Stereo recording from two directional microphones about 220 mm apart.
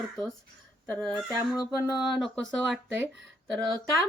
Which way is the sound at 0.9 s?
5° left (ahead or behind).